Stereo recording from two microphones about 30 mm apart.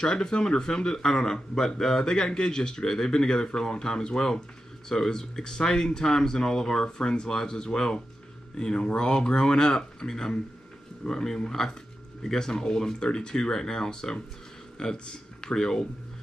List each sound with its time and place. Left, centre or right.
0.0 s speech: left